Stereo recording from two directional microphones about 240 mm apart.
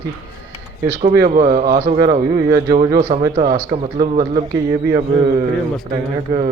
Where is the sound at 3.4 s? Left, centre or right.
Right.